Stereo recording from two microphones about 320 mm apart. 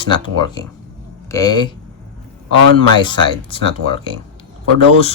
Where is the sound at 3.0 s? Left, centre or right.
Centre.